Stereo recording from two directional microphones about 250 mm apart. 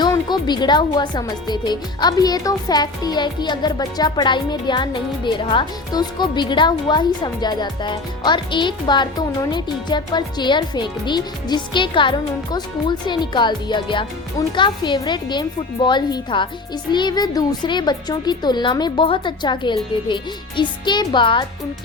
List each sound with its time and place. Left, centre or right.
0.0 s speech: centre